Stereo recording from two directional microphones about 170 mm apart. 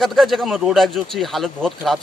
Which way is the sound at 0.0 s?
Centre (ahead or behind).